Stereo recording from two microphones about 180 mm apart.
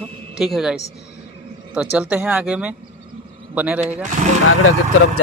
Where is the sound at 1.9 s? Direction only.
5° right (ahead or behind).